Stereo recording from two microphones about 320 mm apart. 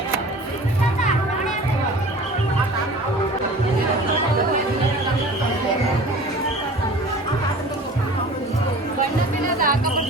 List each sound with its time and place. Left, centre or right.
9.6 s music: right